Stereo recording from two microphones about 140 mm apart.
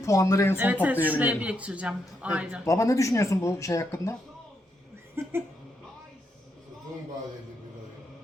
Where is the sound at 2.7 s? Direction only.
20° left (ahead or behind).